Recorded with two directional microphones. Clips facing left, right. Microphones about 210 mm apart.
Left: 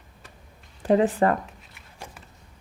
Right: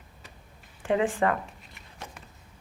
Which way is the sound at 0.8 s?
40° left (ahead or behind).